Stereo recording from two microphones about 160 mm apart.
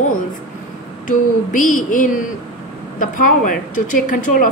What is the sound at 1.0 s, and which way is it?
A woman's voice, 55° left (ahead or behind).